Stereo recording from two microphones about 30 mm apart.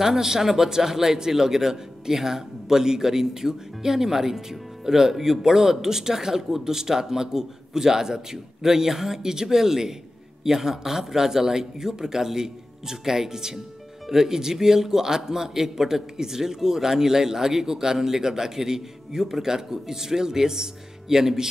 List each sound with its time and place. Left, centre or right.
0.0 s a man's voice: centre